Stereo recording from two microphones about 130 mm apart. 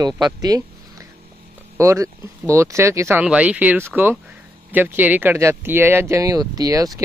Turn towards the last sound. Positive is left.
turn(degrees=-30)  # may be behind; listen again after turning